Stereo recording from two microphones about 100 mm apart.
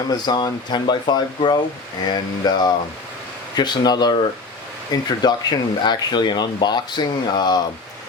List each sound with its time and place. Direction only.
0.1 s speech: 40° left (ahead or behind)